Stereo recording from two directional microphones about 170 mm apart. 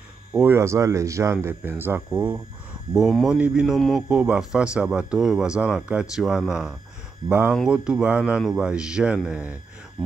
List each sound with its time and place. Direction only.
0.3 s speech: 5° right (ahead or behind)
0.6 s a man's voice: 15° right (ahead or behind); by 10.1 s centre (ahead or behind)